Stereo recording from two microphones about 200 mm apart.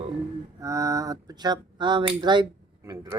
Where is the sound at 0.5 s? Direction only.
15° right (ahead or behind).